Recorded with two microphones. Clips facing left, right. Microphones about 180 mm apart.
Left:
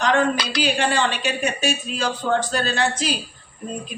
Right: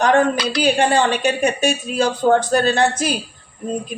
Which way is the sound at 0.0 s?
50° right (ahead or behind).